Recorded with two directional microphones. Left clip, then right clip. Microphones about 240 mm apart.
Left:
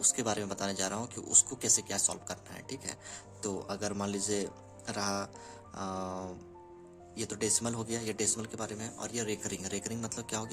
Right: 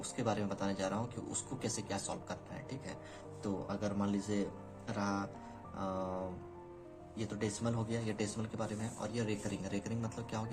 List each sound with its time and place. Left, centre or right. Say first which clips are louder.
0.2 s speech: left 3 dB; left